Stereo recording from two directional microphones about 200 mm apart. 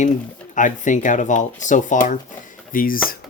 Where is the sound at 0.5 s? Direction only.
40° left (ahead or behind).